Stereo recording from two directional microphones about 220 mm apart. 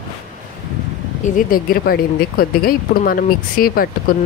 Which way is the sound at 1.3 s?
40° left (ahead or behind).